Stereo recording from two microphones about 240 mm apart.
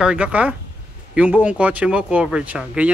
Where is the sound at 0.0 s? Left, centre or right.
Centre.